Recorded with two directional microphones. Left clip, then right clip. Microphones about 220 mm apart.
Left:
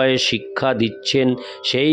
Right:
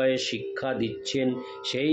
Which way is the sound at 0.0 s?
50° left (ahead or behind).